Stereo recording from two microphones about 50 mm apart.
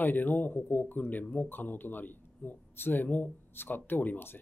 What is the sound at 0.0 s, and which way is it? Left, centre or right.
Speech, left.